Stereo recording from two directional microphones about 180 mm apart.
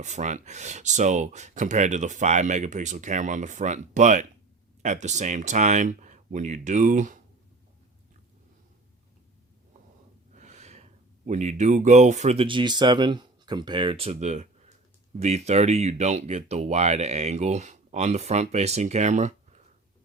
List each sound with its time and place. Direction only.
0.0 s speech: 40° right (ahead or behind)
10.3 s gasp: 40° right (ahead or behind)
11.3 s speech: 40° right (ahead or behind)